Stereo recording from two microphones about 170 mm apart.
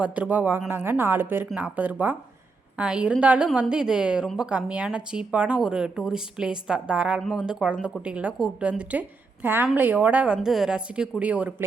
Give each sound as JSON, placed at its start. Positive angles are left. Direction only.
{"t": 0.0, "sound": "a woman's voice", "side_deg": -10}